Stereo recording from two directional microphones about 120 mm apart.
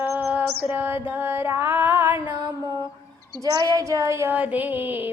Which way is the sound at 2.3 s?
40° right (ahead or behind).